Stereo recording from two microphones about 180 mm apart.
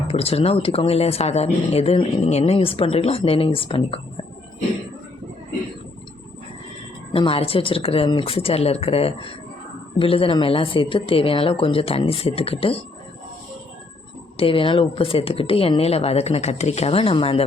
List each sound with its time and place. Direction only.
0.1 s speech: 35° left (ahead or behind)
7.1 s speech: 30° left (ahead or behind)
14.3 s speech: 30° left (ahead or behind)